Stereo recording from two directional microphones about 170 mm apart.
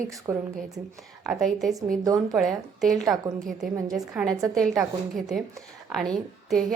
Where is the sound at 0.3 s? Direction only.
15° right (ahead or behind).